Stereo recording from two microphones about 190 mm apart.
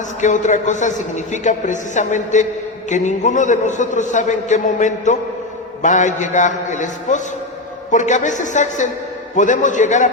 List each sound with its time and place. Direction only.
0.2 s a man's voice: 40° left (ahead or behind)